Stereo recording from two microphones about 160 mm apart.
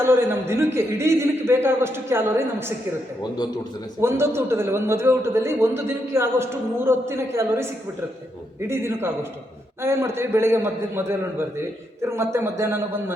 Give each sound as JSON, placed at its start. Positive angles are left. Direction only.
{"t": 0.0, "sound": "a man's voice", "side_deg": -15}
{"t": 4.0, "sound": "a man's voice", "side_deg": -15}